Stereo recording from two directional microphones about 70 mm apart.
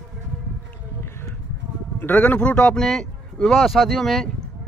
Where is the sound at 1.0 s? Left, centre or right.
Left.